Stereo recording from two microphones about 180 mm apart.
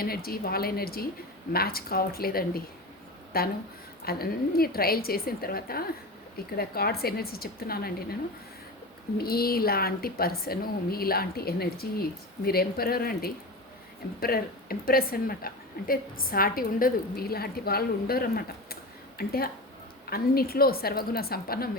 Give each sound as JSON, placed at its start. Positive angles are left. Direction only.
{"t": 0.0, "sound": "a woman's voice", "side_deg": 55}
{"t": 9.1, "sound": "a woman's voice", "side_deg": 55}